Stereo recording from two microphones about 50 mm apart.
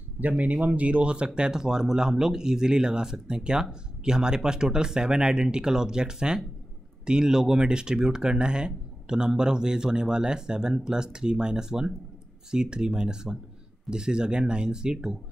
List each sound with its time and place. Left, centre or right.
0.4 s speech: right